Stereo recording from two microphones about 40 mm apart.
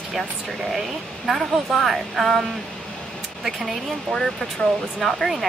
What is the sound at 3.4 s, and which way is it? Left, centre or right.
Speech, centre.